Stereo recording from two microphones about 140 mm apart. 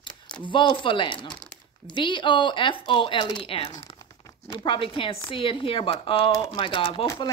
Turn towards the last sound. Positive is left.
turn(degrees=20)  # may be behind; listen again after turning